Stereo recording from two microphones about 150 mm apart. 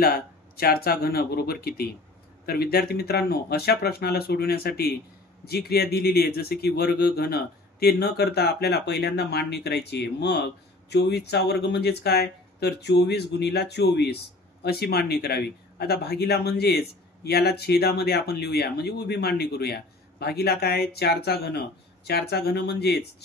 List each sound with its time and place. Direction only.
0.0 s speech: 85° left